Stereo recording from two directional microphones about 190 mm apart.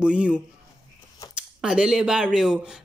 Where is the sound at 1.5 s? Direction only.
5° right (ahead or behind).